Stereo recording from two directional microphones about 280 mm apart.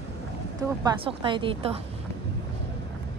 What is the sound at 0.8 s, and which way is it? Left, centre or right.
Speech, centre.